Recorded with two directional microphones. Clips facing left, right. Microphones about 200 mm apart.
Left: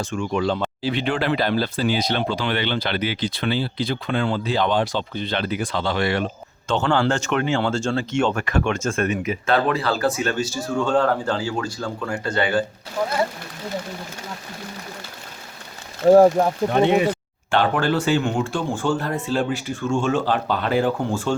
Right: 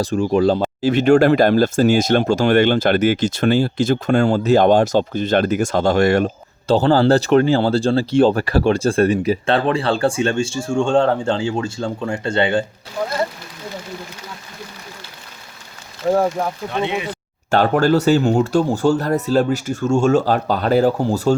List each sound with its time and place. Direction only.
0.0 s speech: 35° right (ahead or behind)
16.7 s speech: 45° left (ahead or behind)
17.5 s speech: 40° right (ahead or behind)